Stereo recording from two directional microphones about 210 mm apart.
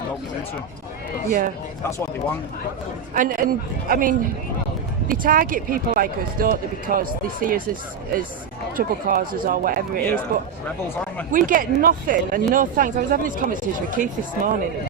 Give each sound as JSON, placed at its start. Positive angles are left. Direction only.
{"t": 1.8, "sound": "speech", "side_deg": 10}
{"t": 3.2, "sound": "speech", "side_deg": -40}
{"t": 8.7, "sound": "speech", "side_deg": -40}